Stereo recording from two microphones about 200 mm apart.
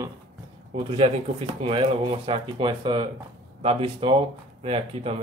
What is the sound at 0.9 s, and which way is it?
Speech, 30° right (ahead or behind).